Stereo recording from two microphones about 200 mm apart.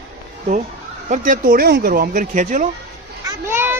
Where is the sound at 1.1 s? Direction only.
40° right (ahead or behind).